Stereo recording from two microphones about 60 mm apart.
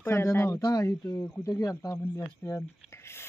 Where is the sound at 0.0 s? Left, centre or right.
Left.